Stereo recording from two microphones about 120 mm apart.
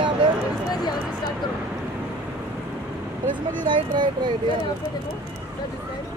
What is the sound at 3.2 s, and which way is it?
Speech, 90° right.